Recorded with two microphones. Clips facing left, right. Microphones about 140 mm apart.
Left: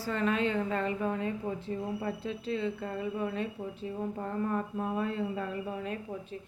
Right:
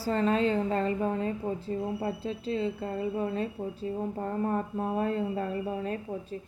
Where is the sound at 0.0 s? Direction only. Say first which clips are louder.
Right 4 dB; 35° right (ahead or behind).